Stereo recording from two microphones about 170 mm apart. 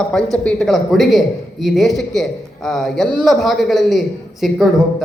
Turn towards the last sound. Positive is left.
turn(degrees=0)  # may be behind; listen again after turning